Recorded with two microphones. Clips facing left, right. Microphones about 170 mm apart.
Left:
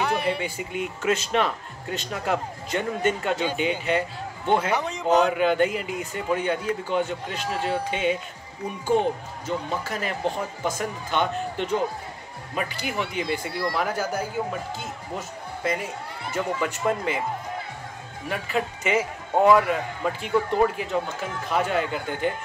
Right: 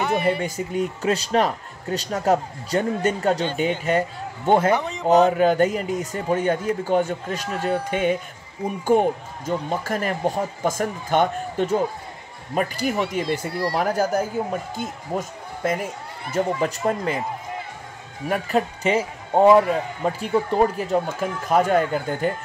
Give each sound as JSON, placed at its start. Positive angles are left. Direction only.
{"t": 0.0, "sound": "music", "side_deg": 0}
{"t": 0.4, "sound": "speech", "side_deg": -40}
{"t": 4.7, "sound": "a man's voice", "side_deg": 0}
{"t": 5.2, "sound": "speech", "side_deg": -40}
{"t": 16.3, "sound": "speech", "side_deg": -35}
{"t": 18.3, "sound": "speech", "side_deg": -40}